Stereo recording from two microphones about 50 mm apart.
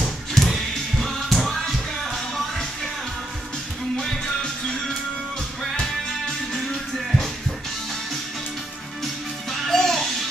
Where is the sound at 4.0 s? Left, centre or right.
Centre.